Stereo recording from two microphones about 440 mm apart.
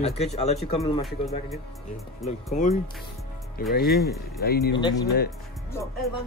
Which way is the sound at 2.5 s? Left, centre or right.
Centre.